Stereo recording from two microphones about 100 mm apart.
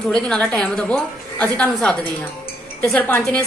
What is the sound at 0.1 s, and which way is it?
A woman's voice, 10° left (ahead or behind).